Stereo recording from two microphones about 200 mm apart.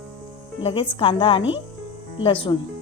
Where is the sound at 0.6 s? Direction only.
30° left (ahead or behind).